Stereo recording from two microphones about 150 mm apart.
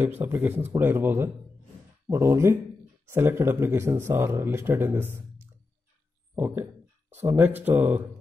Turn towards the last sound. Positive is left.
turn(degrees=-10)  # may be behind; listen again after turning